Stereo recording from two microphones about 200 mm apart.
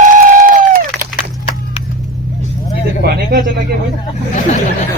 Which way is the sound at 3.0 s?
50° right (ahead or behind).